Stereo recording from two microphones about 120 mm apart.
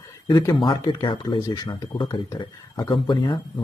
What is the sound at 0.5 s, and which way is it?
Speech, 40° left (ahead or behind).